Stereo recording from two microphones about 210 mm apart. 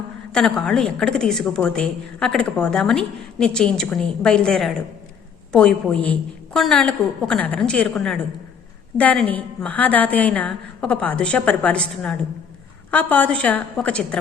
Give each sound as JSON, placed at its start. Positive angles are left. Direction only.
{"t": 0.3, "sound": "a woman's voice", "side_deg": 5}